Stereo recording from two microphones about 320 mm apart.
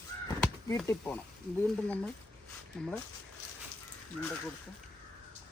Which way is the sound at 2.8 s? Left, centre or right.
Centre.